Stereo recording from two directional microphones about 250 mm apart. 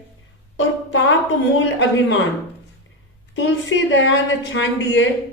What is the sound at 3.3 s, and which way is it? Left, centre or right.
Speech, left.